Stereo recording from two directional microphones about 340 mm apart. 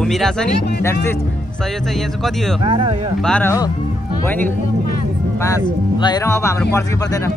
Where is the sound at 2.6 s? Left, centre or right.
Centre.